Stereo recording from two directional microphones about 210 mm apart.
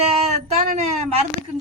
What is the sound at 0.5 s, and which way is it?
Speech, 35° right (ahead or behind).